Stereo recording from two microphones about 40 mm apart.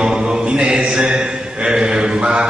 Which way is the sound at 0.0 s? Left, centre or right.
Centre.